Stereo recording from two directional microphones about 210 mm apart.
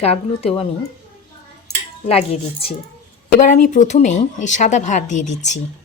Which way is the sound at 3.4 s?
35° left (ahead or behind).